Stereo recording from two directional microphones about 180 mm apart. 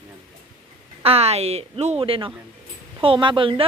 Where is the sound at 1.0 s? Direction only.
35° right (ahead or behind).